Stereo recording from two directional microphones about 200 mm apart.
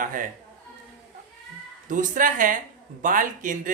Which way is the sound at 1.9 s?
40° right (ahead or behind).